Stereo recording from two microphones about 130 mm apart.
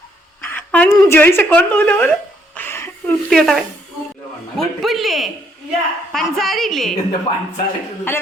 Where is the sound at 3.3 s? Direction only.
Centre (ahead or behind).